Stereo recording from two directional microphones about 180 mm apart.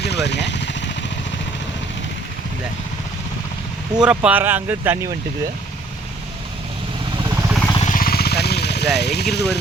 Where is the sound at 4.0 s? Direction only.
5° right (ahead or behind).